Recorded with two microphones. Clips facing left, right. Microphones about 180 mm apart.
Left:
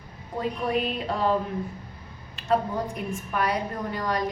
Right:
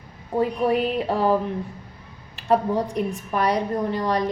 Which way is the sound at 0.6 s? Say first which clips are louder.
Right 6 dB; 35° right (ahead or behind).